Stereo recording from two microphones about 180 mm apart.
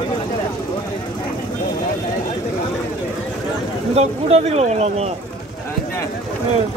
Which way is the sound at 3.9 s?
35° right (ahead or behind).